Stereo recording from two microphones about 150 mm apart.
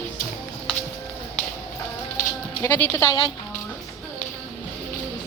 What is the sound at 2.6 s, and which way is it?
Speech, 10° left (ahead or behind).